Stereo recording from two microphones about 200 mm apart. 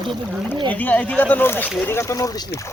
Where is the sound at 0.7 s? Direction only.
10° left (ahead or behind).